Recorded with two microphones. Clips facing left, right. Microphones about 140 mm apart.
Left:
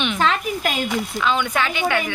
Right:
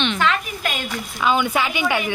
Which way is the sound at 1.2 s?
10° right (ahead or behind).